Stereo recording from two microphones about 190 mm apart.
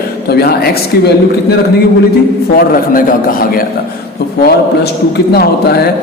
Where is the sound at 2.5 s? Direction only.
50° left (ahead or behind).